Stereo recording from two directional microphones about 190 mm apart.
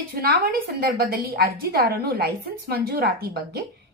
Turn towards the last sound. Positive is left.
turn(degrees=-55)  # may be behind; listen again after turning